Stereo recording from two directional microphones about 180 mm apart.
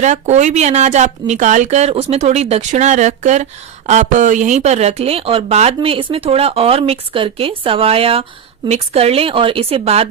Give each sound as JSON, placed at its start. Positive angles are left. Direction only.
{"t": 0.0, "sound": "speech", "side_deg": -40}